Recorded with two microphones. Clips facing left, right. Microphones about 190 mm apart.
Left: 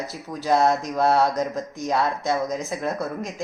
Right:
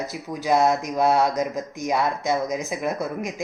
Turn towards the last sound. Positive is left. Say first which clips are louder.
# right 1 dB
turn(degrees=-15)  # may be behind; listen again after turning